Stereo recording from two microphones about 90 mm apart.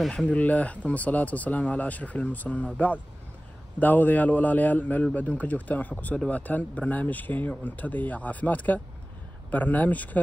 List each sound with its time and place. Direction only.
0.3 s a man's voice: 15° left (ahead or behind)